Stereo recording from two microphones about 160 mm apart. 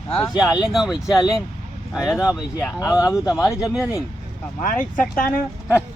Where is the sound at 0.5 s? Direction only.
5° right (ahead or behind).